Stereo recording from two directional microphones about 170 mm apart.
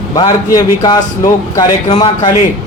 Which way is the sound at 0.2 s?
25° left (ahead or behind).